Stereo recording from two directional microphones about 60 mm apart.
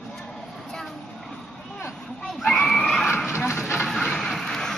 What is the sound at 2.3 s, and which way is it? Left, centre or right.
Screaming, centre.